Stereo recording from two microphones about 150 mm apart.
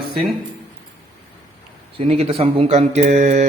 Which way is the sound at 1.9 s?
40° right (ahead or behind).